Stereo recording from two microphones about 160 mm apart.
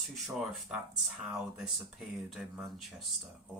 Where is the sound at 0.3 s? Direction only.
Centre (ahead or behind).